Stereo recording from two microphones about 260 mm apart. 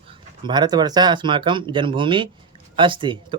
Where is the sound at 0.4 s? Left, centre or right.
Centre.